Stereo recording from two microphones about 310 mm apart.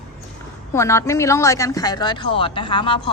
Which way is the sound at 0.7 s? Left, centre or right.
Centre.